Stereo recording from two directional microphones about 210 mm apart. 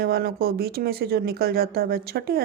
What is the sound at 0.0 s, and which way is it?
Speech, 45° right (ahead or behind).